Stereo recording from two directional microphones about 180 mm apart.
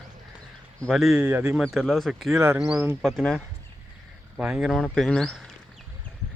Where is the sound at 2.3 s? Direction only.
15° right (ahead or behind).